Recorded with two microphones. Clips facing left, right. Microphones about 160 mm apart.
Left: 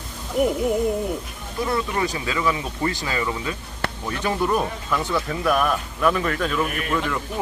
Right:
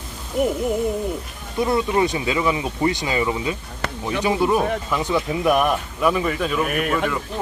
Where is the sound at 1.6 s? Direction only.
25° right (ahead or behind); by 7.0 s 5° right (ahead or behind).